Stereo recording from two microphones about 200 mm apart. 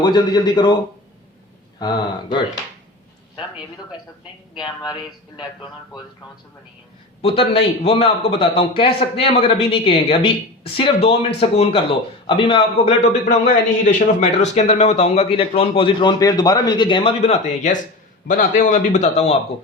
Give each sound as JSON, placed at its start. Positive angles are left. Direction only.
{"t": 0.0, "sound": "a man's voice", "side_deg": 20}
{"t": 1.8, "sound": "a man's voice", "side_deg": 20}
{"t": 4.5, "sound": "a man's voice", "side_deg": 20}
{"t": 7.2, "sound": "a man's voice", "side_deg": 30}
{"t": 13.2, "sound": "speech", "side_deg": 40}